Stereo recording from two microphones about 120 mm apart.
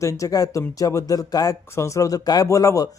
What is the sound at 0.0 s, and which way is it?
Speech, 25° left (ahead or behind).